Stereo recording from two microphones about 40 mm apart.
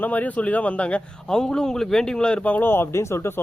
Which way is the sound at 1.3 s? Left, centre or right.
Centre.